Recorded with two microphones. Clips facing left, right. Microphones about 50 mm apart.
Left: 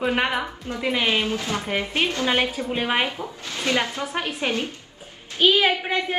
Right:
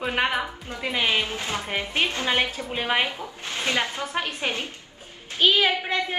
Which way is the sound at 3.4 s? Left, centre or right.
Right.